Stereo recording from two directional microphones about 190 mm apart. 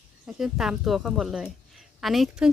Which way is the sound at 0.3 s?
5° right (ahead or behind).